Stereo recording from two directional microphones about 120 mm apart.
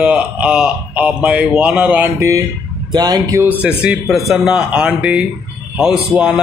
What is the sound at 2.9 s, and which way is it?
Speech, 35° right (ahead or behind).